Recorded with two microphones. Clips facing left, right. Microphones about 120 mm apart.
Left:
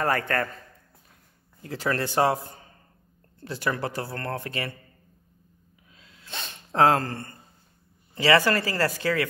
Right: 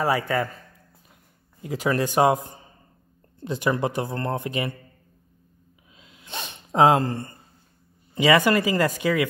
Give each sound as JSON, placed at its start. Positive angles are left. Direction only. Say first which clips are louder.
{"t": 0.0, "sound": "speech", "louder": "right 2 dB", "side_deg": -10}
{"t": 1.6, "sound": "speech", "louder": "right 4 dB", "side_deg": -15}
{"t": 5.9, "sound": "gasp", "louder": "right 2 dB", "side_deg": -20}
{"t": 8.1, "sound": "speech", "louder": "right 2 dB", "side_deg": -15}